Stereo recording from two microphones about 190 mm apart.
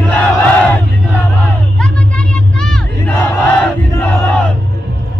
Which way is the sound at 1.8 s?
5° left (ahead or behind).